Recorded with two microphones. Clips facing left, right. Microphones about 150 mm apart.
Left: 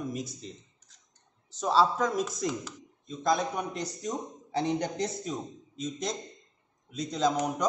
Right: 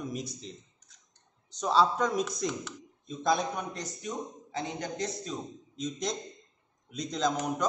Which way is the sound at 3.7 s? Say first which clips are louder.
Left 3 dB; 35° left (ahead or behind).